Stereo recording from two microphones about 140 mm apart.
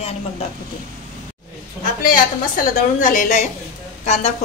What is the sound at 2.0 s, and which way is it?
A woman's voice, 85° left.